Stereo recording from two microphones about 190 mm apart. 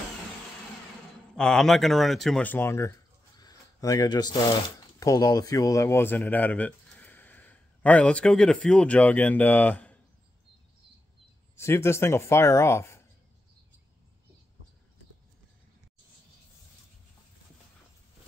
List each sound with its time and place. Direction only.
1.3 s speech: 5° left (ahead or behind)
3.3 s a sound: 20° left (ahead or behind)
5.0 s speech: 20° left (ahead or behind)
11.5 s speech: 15° left (ahead or behind)